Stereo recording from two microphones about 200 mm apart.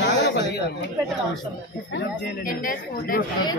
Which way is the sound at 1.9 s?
60° left (ahead or behind).